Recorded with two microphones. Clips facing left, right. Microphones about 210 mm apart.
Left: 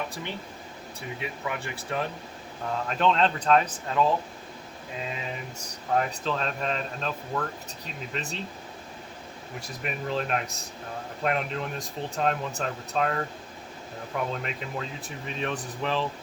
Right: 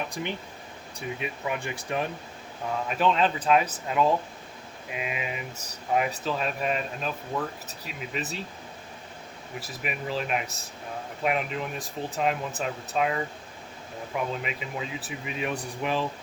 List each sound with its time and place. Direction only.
0.1 s speech: 15° right (ahead or behind)
2.8 s speech: 5° right (ahead or behind)
9.6 s speech: 5° right (ahead or behind)
14.4 s speech: 5° right (ahead or behind)